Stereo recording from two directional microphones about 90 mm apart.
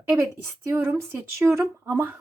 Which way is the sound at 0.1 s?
30° right (ahead or behind).